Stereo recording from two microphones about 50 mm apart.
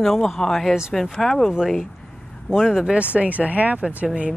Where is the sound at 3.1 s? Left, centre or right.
Right.